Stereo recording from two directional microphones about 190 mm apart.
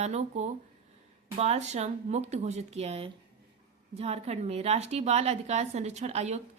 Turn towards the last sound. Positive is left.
turn(degrees=-35)  # may be behind; listen again after turning